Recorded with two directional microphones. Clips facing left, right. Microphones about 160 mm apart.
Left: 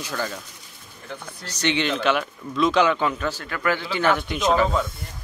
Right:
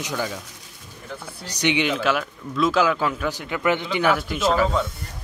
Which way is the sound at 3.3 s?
15° right (ahead or behind).